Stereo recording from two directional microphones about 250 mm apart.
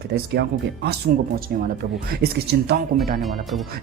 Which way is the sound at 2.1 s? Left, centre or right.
Right.